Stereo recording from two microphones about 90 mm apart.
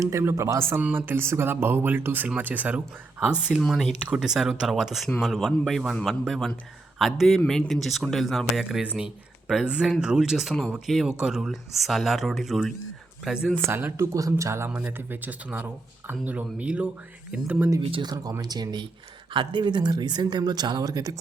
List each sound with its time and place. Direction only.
0.0 s speech: 30° right (ahead or behind)
3.6 s speech: centre (ahead or behind)
9.6 s speech: 10° right (ahead or behind)
13.7 s speech: 25° right (ahead or behind)
18.0 s speech: 45° right (ahead or behind)
19.3 s speech: 65° right (ahead or behind); by 21.2 s 45° right (ahead or behind)